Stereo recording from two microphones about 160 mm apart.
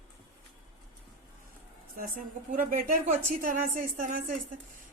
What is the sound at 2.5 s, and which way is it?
A woman's voice, 60° right (ahead or behind).